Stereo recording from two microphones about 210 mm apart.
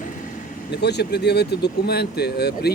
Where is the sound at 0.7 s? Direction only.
55° left (ahead or behind).